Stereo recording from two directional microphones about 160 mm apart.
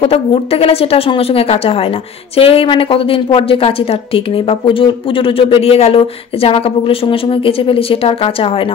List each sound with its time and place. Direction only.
0.0 s a woman's voice: 35° left (ahead or behind)